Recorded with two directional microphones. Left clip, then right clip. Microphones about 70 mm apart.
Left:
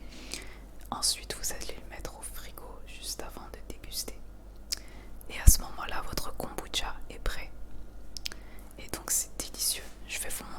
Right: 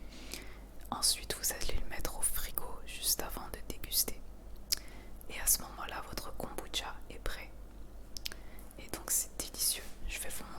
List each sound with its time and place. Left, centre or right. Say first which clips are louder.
0.1 s whispering: left 5 dB; centre
5.3 s whispering: left 4 dB; centre